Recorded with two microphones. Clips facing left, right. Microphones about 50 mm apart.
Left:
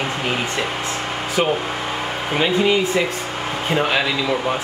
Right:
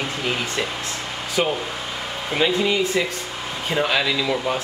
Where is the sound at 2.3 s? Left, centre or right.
Centre.